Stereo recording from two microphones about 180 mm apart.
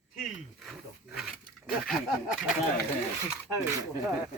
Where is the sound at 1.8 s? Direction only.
Centre (ahead or behind).